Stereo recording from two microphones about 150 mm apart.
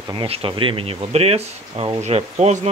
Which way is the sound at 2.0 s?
45° right (ahead or behind).